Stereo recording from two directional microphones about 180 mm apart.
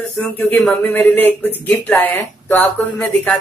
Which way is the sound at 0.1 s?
10° left (ahead or behind).